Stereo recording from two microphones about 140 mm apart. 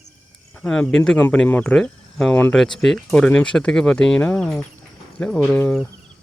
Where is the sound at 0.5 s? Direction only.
10° left (ahead or behind).